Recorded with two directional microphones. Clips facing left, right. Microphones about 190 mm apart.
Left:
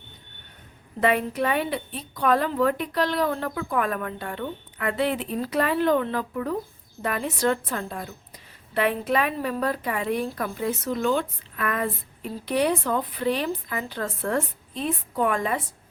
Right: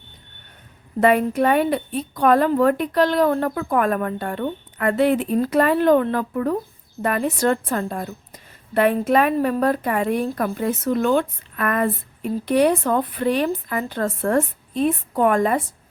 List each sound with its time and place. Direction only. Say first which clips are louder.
1.0 s a woman's voice: right 6 dB; 50° right (ahead or behind)